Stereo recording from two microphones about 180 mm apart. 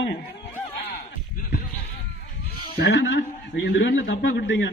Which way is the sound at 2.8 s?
70° left (ahead or behind).